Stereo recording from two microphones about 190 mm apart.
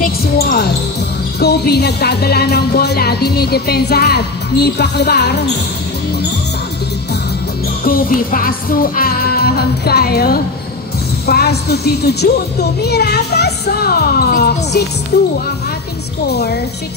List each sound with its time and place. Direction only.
0.0 s speech: 55° left (ahead or behind)
1.4 s music: 60° left (ahead or behind)
7.8 s music: 50° left (ahead or behind)